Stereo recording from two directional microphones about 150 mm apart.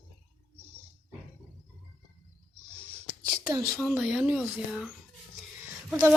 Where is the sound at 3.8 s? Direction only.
5° right (ahead or behind).